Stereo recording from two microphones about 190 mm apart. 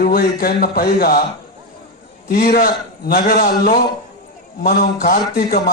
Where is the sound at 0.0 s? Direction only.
50° left (ahead or behind).